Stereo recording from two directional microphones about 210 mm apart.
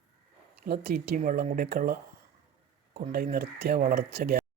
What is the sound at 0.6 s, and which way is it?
Speech, 50° right (ahead or behind).